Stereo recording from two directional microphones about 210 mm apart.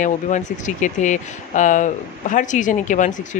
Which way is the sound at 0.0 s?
35° left (ahead or behind).